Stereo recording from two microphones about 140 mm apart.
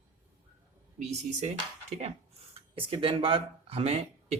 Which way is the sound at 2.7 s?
40° right (ahead or behind).